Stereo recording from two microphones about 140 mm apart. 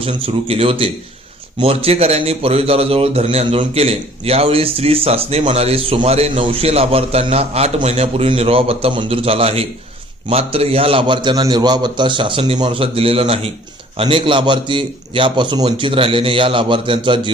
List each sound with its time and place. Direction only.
0.0 s a man's voice: 40° right (ahead or behind)